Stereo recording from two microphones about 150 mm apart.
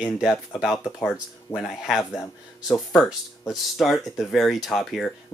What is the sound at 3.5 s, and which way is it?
Speech, centre (ahead or behind).